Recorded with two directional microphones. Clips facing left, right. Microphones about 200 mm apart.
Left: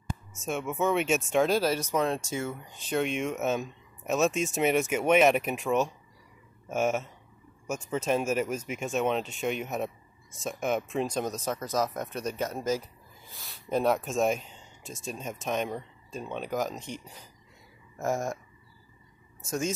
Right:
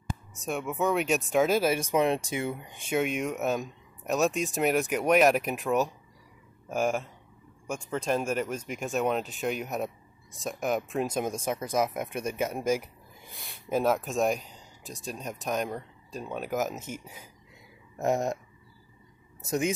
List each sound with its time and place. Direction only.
0.4 s speech: centre (ahead or behind)
13.7 s speech: 5° right (ahead or behind)
17.9 s speech: 20° right (ahead or behind)